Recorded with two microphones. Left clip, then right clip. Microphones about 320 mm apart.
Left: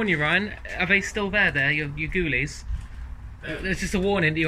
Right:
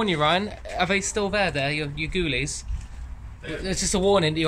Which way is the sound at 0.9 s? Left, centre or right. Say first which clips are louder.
Left 3 dB; right.